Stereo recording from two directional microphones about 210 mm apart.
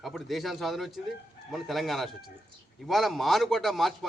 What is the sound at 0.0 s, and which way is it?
A man's voice, centre (ahead or behind).